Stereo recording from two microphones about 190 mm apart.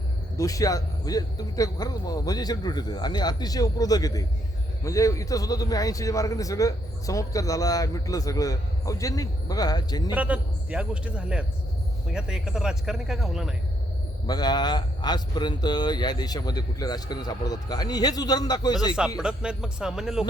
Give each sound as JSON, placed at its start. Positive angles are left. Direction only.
{"t": 0.3, "sound": "a man's voice", "side_deg": 15}
{"t": 10.2, "sound": "speech", "side_deg": -5}
{"t": 14.3, "sound": "speech", "side_deg": 20}
{"t": 18.9, "sound": "speech", "side_deg": -5}